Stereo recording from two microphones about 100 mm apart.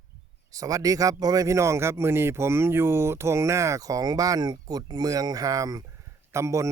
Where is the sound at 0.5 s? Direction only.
35° right (ahead or behind).